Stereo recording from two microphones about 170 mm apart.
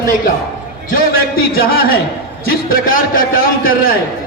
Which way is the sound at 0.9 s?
60° left (ahead or behind).